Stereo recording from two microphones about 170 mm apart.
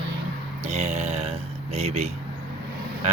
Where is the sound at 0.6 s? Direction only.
40° right (ahead or behind).